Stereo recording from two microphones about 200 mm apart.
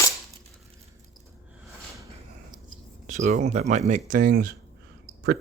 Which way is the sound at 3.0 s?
35° right (ahead or behind).